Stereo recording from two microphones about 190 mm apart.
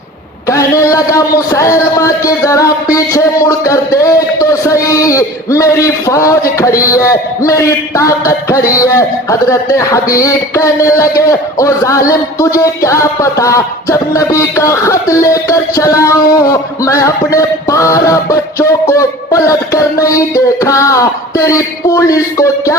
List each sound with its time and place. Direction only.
0.4 s a man's voice: 15° left (ahead or behind)